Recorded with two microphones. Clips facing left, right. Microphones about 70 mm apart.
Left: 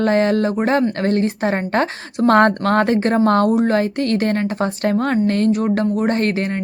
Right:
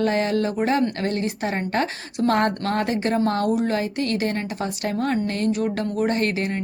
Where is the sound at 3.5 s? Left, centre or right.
Left.